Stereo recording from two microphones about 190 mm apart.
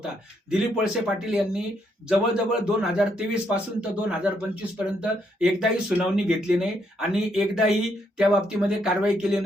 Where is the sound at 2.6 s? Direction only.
5° right (ahead or behind).